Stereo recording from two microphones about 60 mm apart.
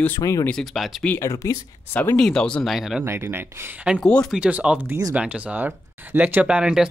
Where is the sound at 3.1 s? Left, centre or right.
Right.